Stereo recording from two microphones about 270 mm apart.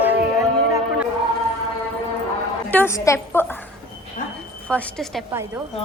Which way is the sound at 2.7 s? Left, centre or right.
Centre.